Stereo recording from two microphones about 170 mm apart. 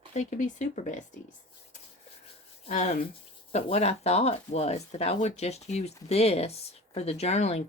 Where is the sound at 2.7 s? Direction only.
45° left (ahead or behind).